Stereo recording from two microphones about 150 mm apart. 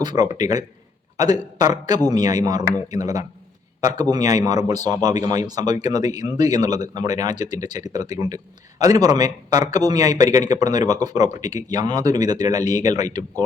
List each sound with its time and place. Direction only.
0.0 s speech: 30° right (ahead or behind)